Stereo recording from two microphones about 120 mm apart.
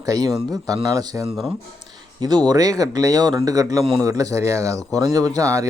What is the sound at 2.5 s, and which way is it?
Speech, 30° right (ahead or behind).